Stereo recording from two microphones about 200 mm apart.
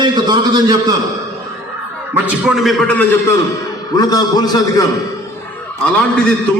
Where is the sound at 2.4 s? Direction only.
Centre (ahead or behind).